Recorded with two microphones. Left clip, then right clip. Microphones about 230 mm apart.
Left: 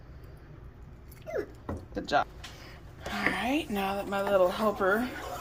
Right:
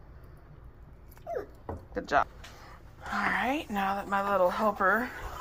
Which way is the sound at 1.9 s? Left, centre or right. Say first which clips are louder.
Right 1 dB; centre.